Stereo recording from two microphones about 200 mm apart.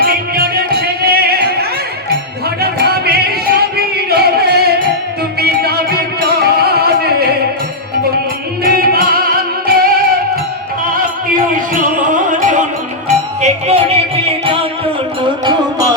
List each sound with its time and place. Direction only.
0.0 s music: 50° right (ahead or behind)
2.6 s music: 50° right (ahead or behind)
8.6 s music: 50° right (ahead or behind)
11.5 s music: 40° right (ahead or behind)